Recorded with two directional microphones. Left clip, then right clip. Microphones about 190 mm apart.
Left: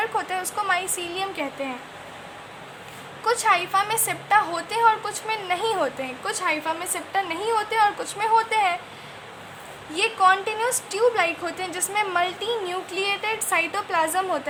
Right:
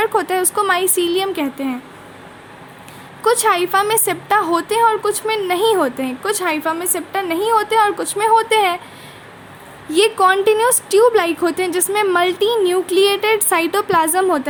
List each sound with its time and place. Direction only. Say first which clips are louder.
0.0 s a woman's voice: right 9 dB; 40° right (ahead or behind)
3.2 s a woman's voice: right 6 dB; 40° right (ahead or behind)
9.9 s a woman's voice: right 6 dB; 40° right (ahead or behind)